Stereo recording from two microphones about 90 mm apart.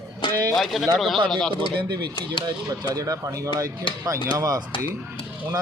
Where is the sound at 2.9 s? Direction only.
40° right (ahead or behind).